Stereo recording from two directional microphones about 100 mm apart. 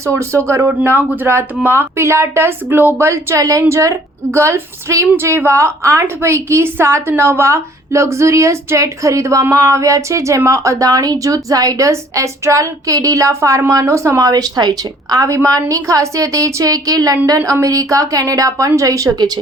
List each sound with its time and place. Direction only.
0.0 s a woman's voice: 30° right (ahead or behind)